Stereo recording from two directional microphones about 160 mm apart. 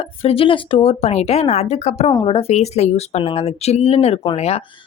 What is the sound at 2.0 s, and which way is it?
Speech, 30° left (ahead or behind).